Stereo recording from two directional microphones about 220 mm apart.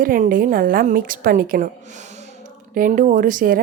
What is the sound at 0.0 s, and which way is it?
A woman's voice, 40° right (ahead or behind).